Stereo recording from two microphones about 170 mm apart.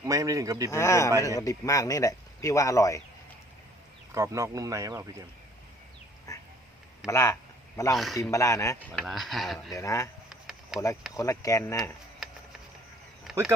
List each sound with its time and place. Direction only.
0.0 s speech: 20° right (ahead or behind)
0.7 s speech: 15° left (ahead or behind)
4.1 s speech: 15° right (ahead or behind)
6.3 s a sound: 20° left (ahead or behind)
7.1 s speech: 15° left (ahead or behind)
7.9 s speech: centre (ahead or behind)
8.2 s speech: 15° left (ahead or behind)
9.0 s speech: centre (ahead or behind)
9.7 s speech: 20° left (ahead or behind)
12.2 s music: centre (ahead or behind)